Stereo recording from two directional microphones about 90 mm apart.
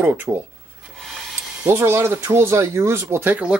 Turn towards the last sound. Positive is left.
turn(degrees=-20)  # may be behind; listen again after turning